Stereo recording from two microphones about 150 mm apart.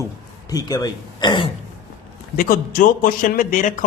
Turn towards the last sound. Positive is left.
turn(degrees=60)  # may be behind; listen again after turning